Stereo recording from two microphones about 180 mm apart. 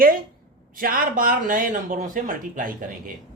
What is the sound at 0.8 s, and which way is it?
Speech, 50° right (ahead or behind).